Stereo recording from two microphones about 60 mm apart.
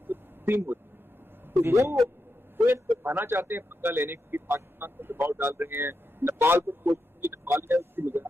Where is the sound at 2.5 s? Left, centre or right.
Right.